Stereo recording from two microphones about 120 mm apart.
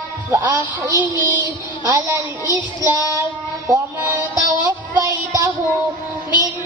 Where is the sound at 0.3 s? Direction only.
20° right (ahead or behind).